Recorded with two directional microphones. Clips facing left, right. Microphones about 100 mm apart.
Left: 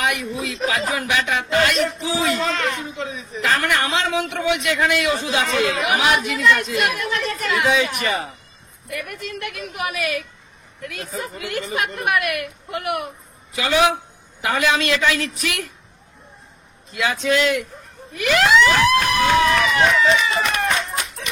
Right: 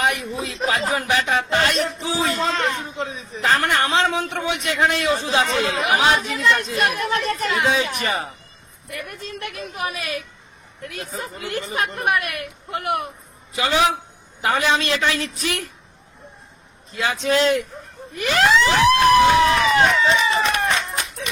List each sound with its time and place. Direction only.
0.0 s a woman's voice: 30° right (ahead or behind)
16.9 s a woman's voice: 35° right (ahead or behind)